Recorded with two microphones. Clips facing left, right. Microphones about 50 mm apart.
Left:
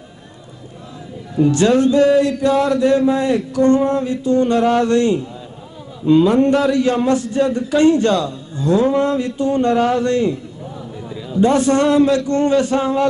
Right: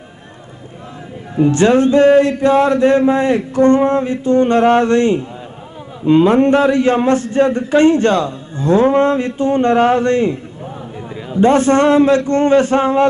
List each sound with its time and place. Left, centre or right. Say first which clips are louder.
1.3 s a man's voice: right 2 dB; right